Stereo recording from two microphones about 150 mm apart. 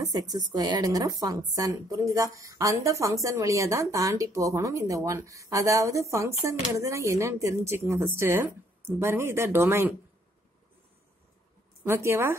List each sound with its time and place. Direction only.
0.0 s a woman's voice: 25° right (ahead or behind)
11.8 s speech: 15° right (ahead or behind)